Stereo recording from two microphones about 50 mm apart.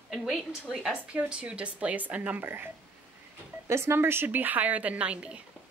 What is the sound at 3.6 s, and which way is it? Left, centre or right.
A woman's voice, right.